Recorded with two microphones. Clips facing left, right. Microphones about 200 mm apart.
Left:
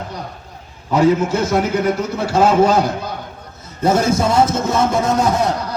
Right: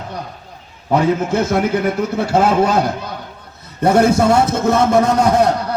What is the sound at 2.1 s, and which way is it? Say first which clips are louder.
Speech: left 1 dB; 60° right (ahead or behind).